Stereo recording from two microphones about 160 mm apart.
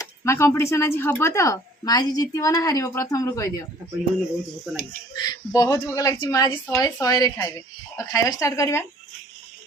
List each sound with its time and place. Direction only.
0.0 s speech: 15° left (ahead or behind)
4.7 s speech: 5° right (ahead or behind)
5.1 s speech: 25° left (ahead or behind)